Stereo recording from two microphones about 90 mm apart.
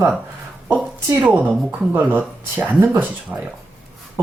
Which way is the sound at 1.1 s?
15° right (ahead or behind).